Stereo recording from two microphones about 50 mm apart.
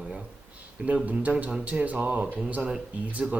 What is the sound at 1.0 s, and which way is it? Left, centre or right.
Speech, right.